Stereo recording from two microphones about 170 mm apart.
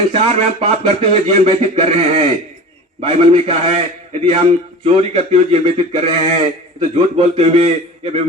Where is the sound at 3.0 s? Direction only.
35° right (ahead or behind).